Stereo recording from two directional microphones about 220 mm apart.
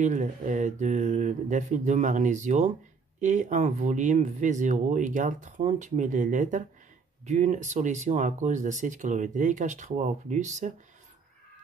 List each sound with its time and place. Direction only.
0.0 s speech: 35° right (ahead or behind)